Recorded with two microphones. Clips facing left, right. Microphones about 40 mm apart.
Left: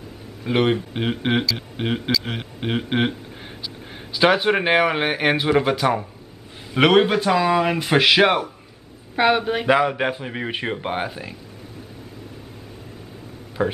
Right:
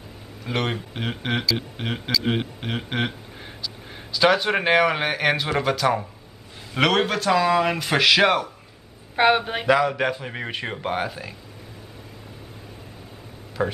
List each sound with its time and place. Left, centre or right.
0.4 s a man's voice: centre
3.6 s a sound: centre
4.6 s speech: centre
9.1 s speech: centre
9.7 s speech: centre
13.6 s speech: centre